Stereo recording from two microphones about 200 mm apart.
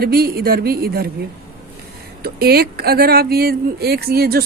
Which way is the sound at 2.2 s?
50° right (ahead or behind).